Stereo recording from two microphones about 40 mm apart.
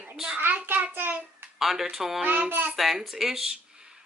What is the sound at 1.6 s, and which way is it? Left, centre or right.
Speech, centre.